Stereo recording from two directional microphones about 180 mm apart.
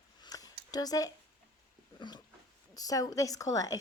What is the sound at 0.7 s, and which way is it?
A woman's voice, 20° left (ahead or behind).